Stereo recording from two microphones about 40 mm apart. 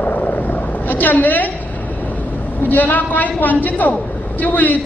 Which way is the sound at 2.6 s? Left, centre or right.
Left.